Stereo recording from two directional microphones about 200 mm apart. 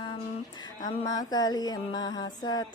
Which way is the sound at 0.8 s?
20° left (ahead or behind).